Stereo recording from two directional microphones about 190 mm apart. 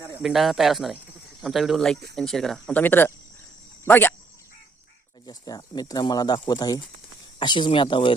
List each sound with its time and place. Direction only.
0.2 s speech: centre (ahead or behind)
5.2 s speech: 20° left (ahead or behind)